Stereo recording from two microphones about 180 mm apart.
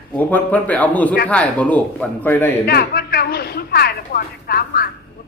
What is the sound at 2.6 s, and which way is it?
Speech, 60° left (ahead or behind).